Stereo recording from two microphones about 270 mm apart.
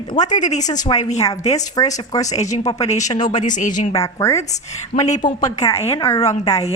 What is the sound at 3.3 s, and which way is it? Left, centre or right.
Speech, left.